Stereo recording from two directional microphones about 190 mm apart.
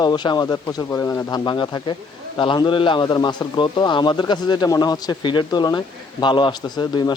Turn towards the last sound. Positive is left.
turn(degrees=20)  # may be behind; listen again after turning